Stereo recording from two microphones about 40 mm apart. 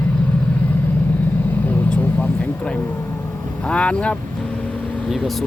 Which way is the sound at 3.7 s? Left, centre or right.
Left.